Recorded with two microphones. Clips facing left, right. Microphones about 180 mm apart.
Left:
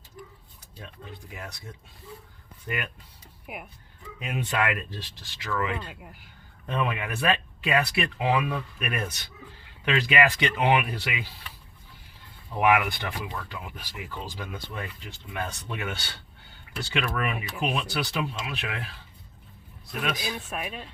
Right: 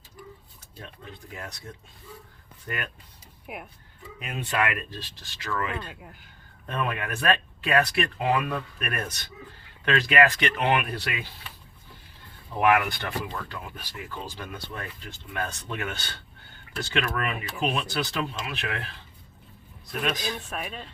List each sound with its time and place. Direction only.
2.6 s speech: 15° left (ahead or behind)
3.4 s speech: centre (ahead or behind)
4.2 s speech: 20° left (ahead or behind)
5.9 s speech: 5° left (ahead or behind)
12.5 s speech: 10° left (ahead or behind)
19.9 s speech: 5° left (ahead or behind)